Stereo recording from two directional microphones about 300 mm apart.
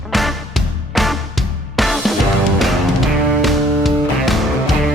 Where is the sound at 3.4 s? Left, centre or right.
Centre.